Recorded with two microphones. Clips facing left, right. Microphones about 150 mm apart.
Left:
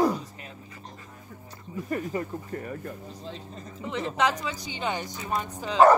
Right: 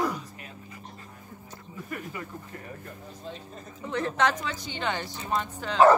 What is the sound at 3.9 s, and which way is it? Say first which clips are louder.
Speech: even; 5° left (ahead or behind).